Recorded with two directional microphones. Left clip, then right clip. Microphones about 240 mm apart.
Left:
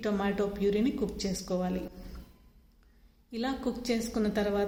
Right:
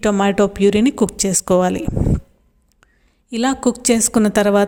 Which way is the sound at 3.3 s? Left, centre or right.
Right.